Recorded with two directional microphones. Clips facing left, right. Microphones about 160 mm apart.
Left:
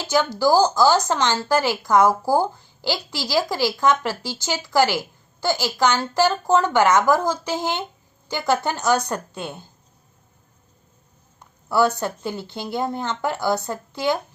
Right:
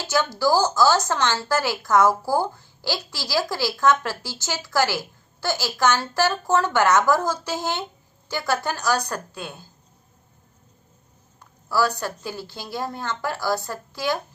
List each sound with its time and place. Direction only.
0.0 s a woman's voice: 15° left (ahead or behind)
11.7 s a woman's voice: 20° left (ahead or behind)